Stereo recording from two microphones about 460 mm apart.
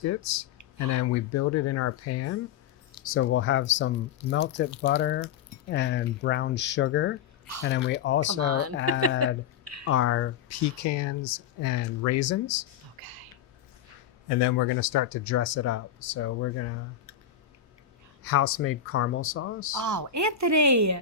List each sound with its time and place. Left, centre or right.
0.0 s speech: left
8.4 s speech: right
9.8 s speech: left
14.3 s speech: left
18.2 s speech: left
19.7 s speech: right